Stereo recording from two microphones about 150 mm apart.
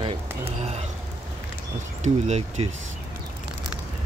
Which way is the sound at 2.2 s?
45° right (ahead or behind).